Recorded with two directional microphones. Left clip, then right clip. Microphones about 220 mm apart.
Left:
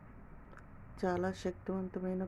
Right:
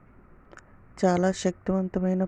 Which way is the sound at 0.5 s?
35° right (ahead or behind).